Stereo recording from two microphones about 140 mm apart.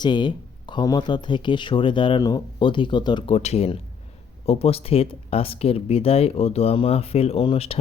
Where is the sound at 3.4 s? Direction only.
50° left (ahead or behind).